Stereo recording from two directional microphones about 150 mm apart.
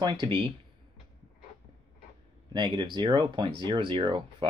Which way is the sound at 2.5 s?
30° right (ahead or behind).